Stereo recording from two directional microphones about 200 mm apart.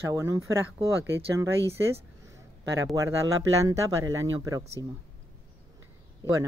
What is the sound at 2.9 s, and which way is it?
Speech, 15° right (ahead or behind).